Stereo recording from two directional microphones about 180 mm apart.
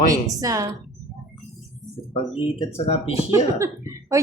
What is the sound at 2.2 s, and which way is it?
Speech, 35° left (ahead or behind).